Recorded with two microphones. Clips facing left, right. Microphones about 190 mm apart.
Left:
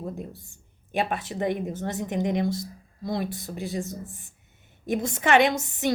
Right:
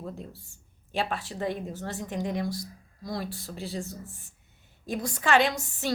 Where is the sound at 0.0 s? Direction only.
15° left (ahead or behind).